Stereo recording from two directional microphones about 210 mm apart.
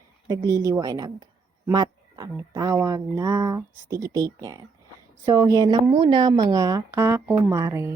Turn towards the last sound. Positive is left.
turn(degrees=-15)  # may be behind; listen again after turning